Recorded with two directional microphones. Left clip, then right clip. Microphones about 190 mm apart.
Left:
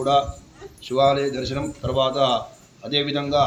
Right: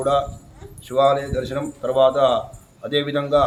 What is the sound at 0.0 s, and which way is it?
A man's voice, 20° right (ahead or behind).